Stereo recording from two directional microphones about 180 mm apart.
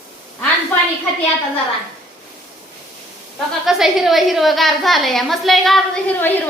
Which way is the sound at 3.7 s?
Centre (ahead or behind).